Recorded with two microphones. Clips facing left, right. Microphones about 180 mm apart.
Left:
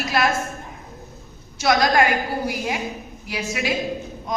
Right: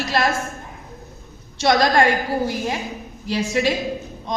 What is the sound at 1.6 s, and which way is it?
A man's voice, 25° right (ahead or behind).